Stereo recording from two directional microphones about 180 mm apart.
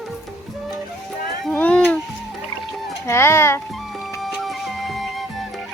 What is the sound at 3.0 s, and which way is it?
Speech, 15° left (ahead or behind).